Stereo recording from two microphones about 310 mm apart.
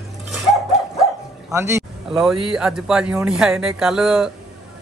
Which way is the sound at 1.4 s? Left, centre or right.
Centre.